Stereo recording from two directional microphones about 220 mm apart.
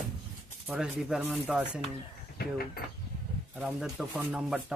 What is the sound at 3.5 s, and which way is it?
Speech, 5° right (ahead or behind).